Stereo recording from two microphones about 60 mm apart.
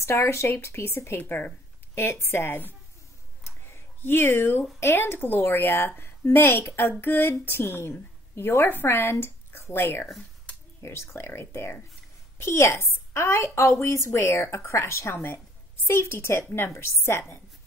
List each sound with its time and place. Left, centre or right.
0.0 s a woman's voice: left
3.4 s a sound: left
4.7 s a woman's voice: left